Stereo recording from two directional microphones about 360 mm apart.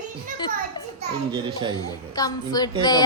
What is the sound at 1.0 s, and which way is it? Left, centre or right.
Speech, centre.